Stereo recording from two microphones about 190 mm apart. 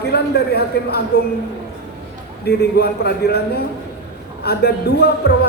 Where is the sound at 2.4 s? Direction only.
55° left (ahead or behind).